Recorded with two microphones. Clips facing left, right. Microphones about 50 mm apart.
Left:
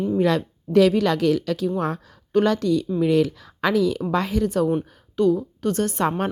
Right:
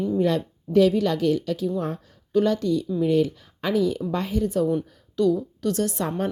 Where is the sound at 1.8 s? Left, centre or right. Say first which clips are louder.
Left 3 dB; left.